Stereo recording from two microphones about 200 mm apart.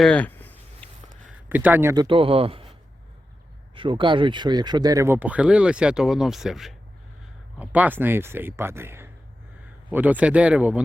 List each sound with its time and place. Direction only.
0.0 s a sound: 5° left (ahead or behind)
1.5 s speech: 10° right (ahead or behind)
2.0 s speech: 25° right (ahead or behind)
3.8 s speech: 25° right (ahead or behind); by 10.8 s 5° right (ahead or behind)